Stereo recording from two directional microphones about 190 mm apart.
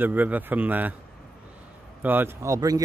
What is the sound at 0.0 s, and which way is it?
Speech, 10° right (ahead or behind).